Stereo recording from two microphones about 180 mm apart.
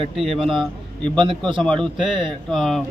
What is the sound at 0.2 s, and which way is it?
A man's voice, centre (ahead or behind).